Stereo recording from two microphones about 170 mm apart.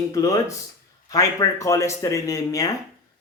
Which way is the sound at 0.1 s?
20° left (ahead or behind).